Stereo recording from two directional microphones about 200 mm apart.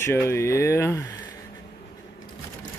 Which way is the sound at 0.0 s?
15° left (ahead or behind).